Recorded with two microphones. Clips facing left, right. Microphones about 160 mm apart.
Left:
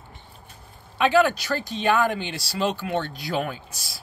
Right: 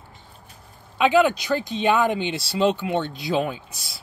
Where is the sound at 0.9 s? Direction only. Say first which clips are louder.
Right 1 dB; 15° right (ahead or behind).